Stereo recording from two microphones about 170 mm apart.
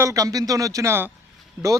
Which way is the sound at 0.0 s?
20° right (ahead or behind).